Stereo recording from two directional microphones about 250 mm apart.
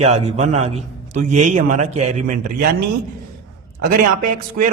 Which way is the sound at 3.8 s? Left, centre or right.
Right.